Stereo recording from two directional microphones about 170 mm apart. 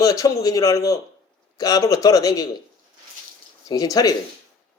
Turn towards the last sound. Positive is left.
turn(degrees=20)  # may be behind; listen again after turning